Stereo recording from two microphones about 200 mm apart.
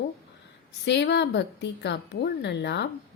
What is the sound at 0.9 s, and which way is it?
A woman's voice, 60° left (ahead or behind).